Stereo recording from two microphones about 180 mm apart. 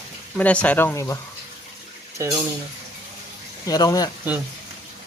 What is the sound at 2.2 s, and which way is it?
Speech, 15° right (ahead or behind).